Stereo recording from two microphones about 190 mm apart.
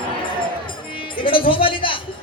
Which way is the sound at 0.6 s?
25° left (ahead or behind).